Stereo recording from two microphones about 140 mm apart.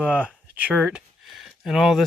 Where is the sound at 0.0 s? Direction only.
5° right (ahead or behind).